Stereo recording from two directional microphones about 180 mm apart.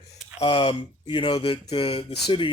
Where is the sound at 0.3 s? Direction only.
30° left (ahead or behind).